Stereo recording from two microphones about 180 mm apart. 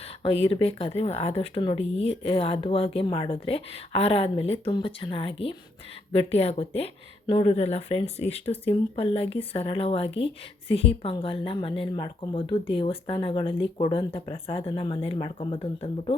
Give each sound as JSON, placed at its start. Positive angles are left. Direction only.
{"t": 0.4, "sound": "speech", "side_deg": 30}